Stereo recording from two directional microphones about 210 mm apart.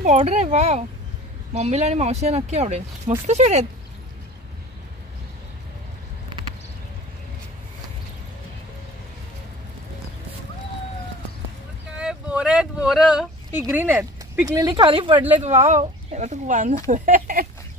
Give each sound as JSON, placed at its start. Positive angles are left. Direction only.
{"t": 0.0, "sound": "speech", "side_deg": -30}
{"t": 12.0, "sound": "a sound", "side_deg": -5}
{"t": 13.6, "sound": "speech", "side_deg": -10}